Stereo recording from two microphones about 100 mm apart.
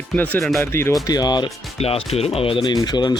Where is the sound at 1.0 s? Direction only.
40° left (ahead or behind).